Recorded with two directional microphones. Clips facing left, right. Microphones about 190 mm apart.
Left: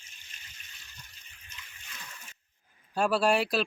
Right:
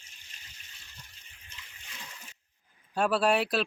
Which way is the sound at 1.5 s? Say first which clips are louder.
Left 1 dB; 30° right (ahead or behind).